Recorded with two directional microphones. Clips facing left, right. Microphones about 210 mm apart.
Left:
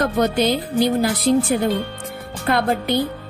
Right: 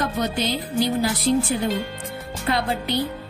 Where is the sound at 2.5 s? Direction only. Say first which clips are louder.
Left 4 dB; 50° left (ahead or behind).